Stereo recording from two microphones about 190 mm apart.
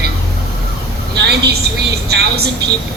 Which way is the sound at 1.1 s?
60° right (ahead or behind).